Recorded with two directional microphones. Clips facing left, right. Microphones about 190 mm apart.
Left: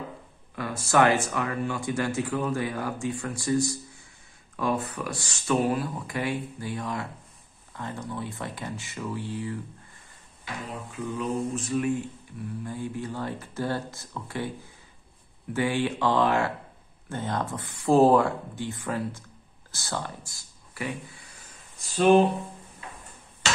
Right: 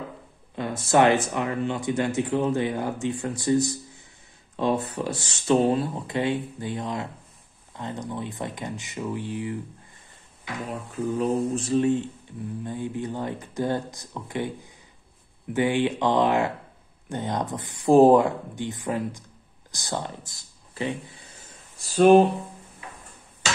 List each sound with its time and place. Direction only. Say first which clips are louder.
0.6 s mantra: right 2 dB; 25° right (ahead or behind)
10.9 s mantra: right 6 dB; 35° right (ahead or behind); by 16.5 s 20° right (ahead or behind)
17.1 s speech: right 2 dB; 20° right (ahead or behind)